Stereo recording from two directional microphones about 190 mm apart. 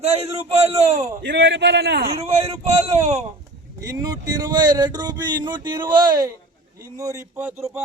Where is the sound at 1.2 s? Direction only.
65° right (ahead or behind).